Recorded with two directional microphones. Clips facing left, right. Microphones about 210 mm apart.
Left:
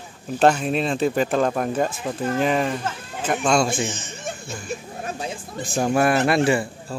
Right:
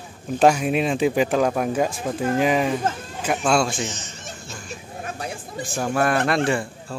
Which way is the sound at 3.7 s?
55° left (ahead or behind).